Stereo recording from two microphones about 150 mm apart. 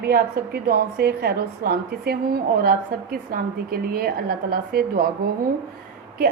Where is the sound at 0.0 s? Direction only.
90° right.